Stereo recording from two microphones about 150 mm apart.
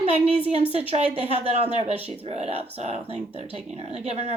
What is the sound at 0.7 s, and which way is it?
Speech, 45° right (ahead or behind).